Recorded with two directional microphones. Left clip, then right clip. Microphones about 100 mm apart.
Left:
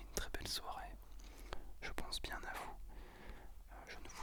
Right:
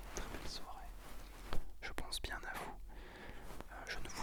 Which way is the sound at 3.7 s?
10° right (ahead or behind).